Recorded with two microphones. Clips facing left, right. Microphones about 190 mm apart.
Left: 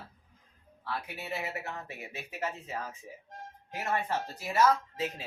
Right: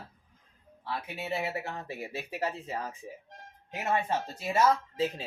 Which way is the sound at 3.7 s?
20° right (ahead or behind).